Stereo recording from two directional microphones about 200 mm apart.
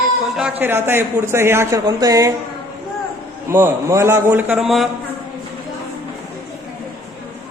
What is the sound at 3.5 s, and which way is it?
A man's voice, 10° right (ahead or behind).